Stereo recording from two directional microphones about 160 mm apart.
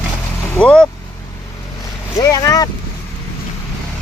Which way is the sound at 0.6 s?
5° left (ahead or behind).